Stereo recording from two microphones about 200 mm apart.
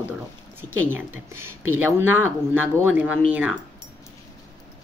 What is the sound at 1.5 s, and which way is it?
Speech, 90° right.